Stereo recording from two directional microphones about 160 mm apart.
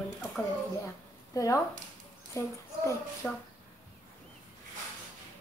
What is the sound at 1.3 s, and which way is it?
A child's voice, 20° left (ahead or behind).